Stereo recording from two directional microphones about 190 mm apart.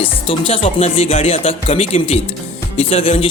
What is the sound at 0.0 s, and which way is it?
Speech, 30° left (ahead or behind).